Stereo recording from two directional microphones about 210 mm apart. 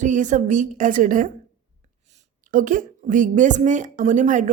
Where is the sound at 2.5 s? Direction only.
40° right (ahead or behind).